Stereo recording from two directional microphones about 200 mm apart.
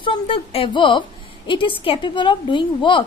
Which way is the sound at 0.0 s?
25° left (ahead or behind).